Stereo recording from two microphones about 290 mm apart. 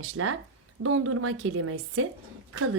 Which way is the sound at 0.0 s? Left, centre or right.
Right.